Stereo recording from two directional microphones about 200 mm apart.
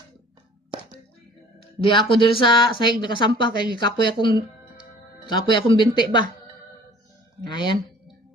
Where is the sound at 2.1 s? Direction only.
25° left (ahead or behind).